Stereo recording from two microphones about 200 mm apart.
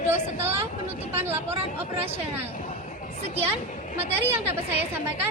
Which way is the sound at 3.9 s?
30° right (ahead or behind).